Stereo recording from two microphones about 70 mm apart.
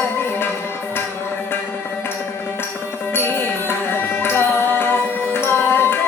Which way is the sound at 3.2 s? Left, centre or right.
Left.